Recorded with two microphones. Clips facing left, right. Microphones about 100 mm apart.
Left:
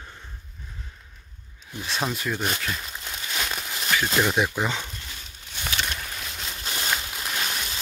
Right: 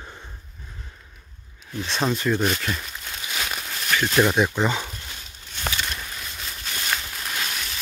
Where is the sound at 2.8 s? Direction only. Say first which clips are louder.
Even; 20° left (ahead or behind).